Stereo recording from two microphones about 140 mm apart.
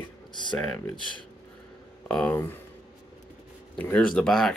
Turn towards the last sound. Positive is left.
turn(degrees=5)  # may be behind; listen again after turning